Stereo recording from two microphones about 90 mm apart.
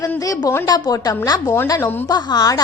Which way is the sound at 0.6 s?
50° left (ahead or behind).